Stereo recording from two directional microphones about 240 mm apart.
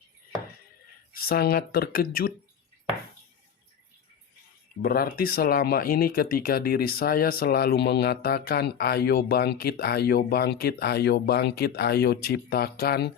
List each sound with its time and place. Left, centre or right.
1.1 s speech: left
4.8 s speech: left